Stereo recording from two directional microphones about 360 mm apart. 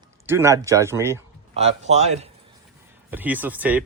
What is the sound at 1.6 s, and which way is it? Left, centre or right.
Speech, centre.